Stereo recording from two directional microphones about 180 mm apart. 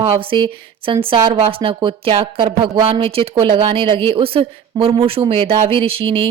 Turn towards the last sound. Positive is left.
turn(degrees=-30)  # may be behind; listen again after turning